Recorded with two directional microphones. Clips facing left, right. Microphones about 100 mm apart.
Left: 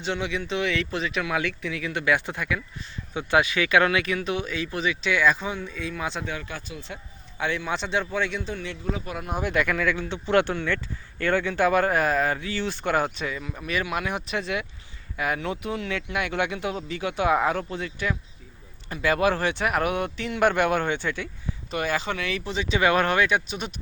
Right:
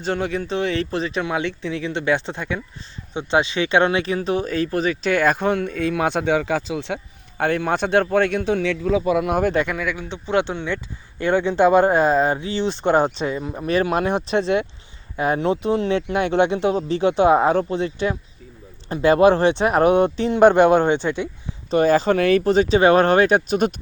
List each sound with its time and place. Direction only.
0.0 s speech: 45° right (ahead or behind); by 7.0 s 80° right
7.3 s a man's voice: 50° right (ahead or behind); by 9.4 s 90° right
9.4 s speech: 35° right (ahead or behind)
9.6 s speech: 15° right (ahead or behind)
21.7 s speech: 35° right (ahead or behind)